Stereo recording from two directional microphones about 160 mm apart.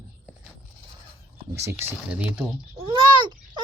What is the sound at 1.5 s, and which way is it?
Speech, 15° right (ahead or behind).